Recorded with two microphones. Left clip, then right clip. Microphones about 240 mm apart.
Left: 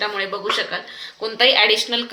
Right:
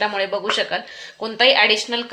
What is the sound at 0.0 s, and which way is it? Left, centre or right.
A woman's voice, right.